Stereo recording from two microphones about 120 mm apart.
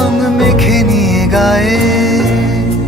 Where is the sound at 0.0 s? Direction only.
Centre (ahead or behind).